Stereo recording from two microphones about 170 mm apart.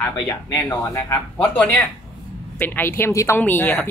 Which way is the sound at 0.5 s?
15° left (ahead or behind).